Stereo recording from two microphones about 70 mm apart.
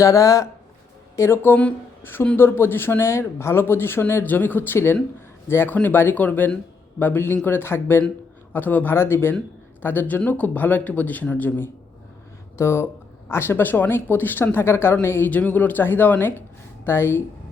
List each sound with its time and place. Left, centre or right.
0.0 s speech: left
1.1 s speech: left
15.3 s speech: left